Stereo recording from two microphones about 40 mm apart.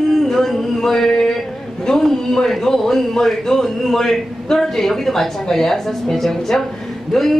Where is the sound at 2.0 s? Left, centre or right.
Centre.